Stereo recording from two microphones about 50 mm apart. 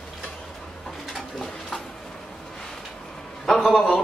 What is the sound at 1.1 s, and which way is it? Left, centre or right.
Bird, centre.